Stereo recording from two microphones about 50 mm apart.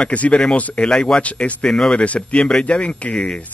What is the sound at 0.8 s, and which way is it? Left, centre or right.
Speech, centre.